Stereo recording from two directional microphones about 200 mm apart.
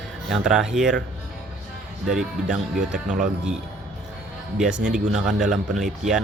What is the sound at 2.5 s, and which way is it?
Speech, 5° right (ahead or behind).